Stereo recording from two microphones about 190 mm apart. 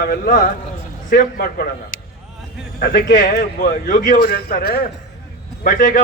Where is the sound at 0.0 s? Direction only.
50° left (ahead or behind).